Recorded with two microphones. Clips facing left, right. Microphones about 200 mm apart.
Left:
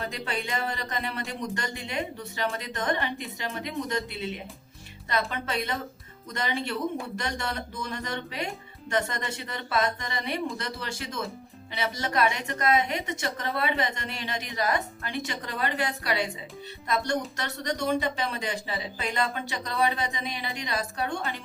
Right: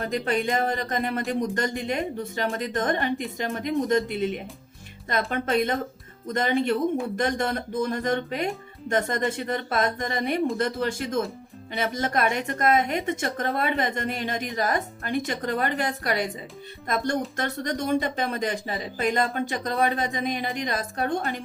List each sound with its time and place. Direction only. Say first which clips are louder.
0.0 s a woman's voice: right 7 dB; 50° right (ahead or behind)